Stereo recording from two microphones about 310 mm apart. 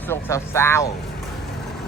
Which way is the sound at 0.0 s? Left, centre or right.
Centre.